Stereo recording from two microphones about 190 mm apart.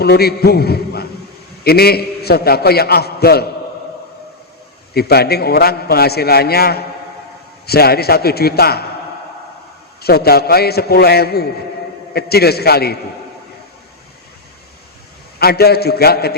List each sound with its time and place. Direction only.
0.0 s a man's voice: 55° left (ahead or behind)
4.9 s a man's voice: 55° left (ahead or behind)
10.0 s a man's voice: 55° left (ahead or behind)
15.4 s a man's voice: 55° left (ahead or behind)